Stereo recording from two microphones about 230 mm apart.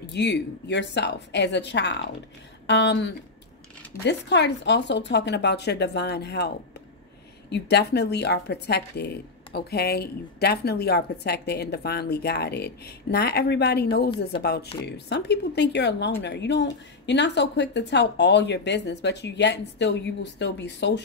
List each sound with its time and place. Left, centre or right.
0.1 s a woman's voice: left